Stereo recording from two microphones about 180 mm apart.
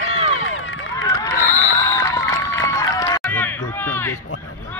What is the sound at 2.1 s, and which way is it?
Crowd, 15° left (ahead or behind).